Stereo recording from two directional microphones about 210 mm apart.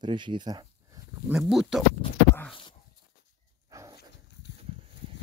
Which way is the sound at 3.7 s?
15° right (ahead or behind).